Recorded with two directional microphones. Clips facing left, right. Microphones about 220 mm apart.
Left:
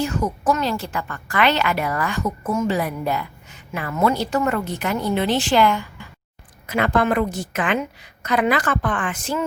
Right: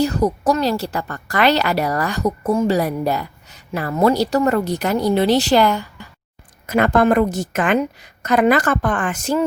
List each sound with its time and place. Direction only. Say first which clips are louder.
0.0 s a woman's voice: right 5 dB; 35° right (ahead or behind)